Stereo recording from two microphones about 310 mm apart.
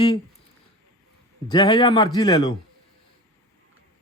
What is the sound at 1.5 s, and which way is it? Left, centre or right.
A man's voice, centre.